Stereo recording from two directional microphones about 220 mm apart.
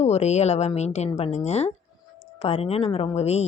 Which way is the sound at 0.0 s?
30° left (ahead or behind).